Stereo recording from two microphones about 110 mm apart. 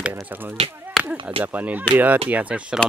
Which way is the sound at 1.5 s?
15° right (ahead or behind).